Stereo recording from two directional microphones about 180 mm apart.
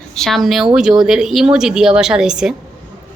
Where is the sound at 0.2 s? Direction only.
Centre (ahead or behind).